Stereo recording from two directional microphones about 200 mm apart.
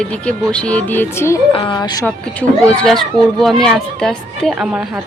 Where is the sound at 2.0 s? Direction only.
5° left (ahead or behind).